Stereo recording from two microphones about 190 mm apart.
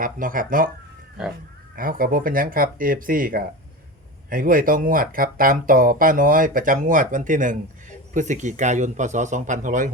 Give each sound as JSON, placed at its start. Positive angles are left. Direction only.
{"t": 0.0, "sound": "speech", "side_deg": -45}
{"t": 1.7, "sound": "speech", "side_deg": -50}